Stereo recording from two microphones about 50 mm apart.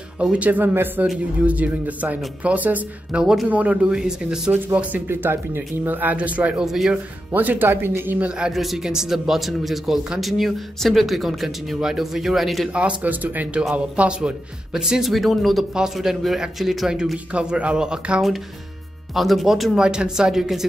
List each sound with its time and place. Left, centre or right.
0.2 s speech: right
3.1 s speech: centre
3.4 s speech: right
5.0 s speech: right
6.1 s speech: right
6.6 s speech: centre
7.3 s speech: right
8.5 s speech: centre
12.7 s speech: right
14.7 s speech: centre
15.7 s speech: centre
19.1 s speech: centre